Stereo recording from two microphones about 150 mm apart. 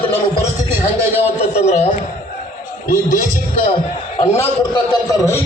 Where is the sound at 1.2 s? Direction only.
45° left (ahead or behind).